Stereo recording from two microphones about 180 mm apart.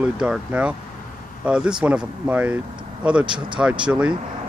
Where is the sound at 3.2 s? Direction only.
25° right (ahead or behind).